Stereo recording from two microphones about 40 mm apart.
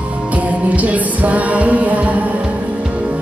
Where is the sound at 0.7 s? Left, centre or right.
Right.